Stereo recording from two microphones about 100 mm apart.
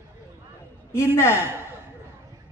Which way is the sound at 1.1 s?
25° left (ahead or behind).